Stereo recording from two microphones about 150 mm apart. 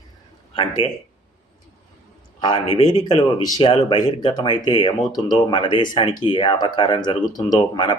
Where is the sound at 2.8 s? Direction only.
30° left (ahead or behind).